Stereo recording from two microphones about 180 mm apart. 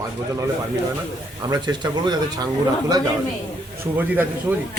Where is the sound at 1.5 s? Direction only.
25° right (ahead or behind).